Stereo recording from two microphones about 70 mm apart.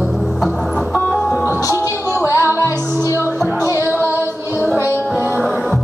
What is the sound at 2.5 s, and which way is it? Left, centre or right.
Music, left.